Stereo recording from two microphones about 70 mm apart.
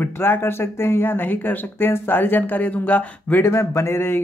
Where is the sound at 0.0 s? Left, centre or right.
Left.